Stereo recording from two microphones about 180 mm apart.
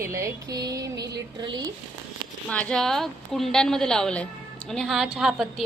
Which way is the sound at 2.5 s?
5° left (ahead or behind).